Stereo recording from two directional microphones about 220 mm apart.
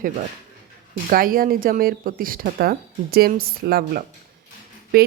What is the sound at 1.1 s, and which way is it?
A woman's voice, 40° right (ahead or behind).